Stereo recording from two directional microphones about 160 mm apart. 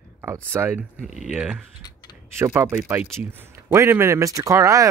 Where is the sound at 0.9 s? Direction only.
Centre (ahead or behind).